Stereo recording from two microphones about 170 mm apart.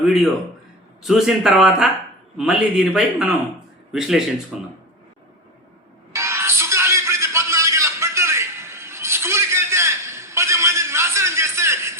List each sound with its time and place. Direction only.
1.0 s a man's voice: centre (ahead or behind)
6.1 s music: 15° right (ahead or behind)